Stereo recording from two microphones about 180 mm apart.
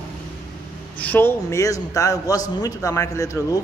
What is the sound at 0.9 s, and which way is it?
A man's voice, 10° left (ahead or behind).